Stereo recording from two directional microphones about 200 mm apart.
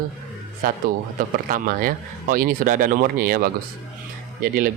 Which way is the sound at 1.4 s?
45° right (ahead or behind).